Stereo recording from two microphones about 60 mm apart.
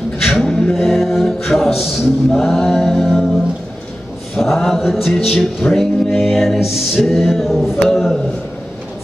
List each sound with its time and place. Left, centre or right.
0.2 s a capella: centre
2.4 s music: centre
4.4 s music: centre